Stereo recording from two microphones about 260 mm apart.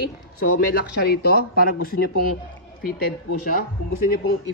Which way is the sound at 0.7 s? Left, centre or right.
Left.